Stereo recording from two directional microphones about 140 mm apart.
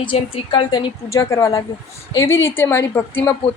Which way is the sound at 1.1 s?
20° left (ahead or behind).